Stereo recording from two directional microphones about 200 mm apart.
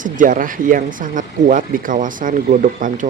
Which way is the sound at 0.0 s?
40° right (ahead or behind).